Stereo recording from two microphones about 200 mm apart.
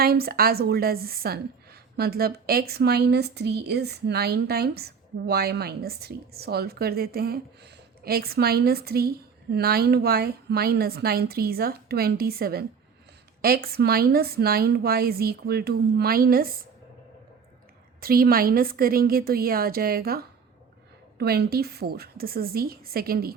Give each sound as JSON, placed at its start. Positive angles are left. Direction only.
{"t": 0.0, "sound": "a woman's voice", "side_deg": -50}
{"t": 18.0, "sound": "a woman's voice", "side_deg": -50}